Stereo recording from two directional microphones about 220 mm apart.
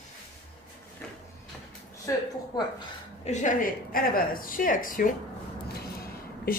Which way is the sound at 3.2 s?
30° left (ahead or behind).